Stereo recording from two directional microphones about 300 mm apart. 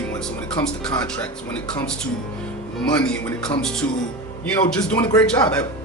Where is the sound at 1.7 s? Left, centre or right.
Centre.